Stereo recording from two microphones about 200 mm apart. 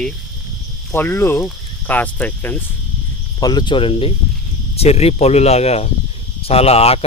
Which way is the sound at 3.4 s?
20° left (ahead or behind).